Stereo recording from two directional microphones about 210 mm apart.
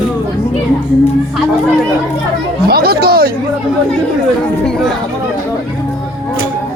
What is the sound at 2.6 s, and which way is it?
Speech, 45° right (ahead or behind).